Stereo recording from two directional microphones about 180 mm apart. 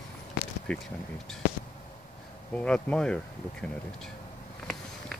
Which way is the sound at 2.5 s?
5° left (ahead or behind).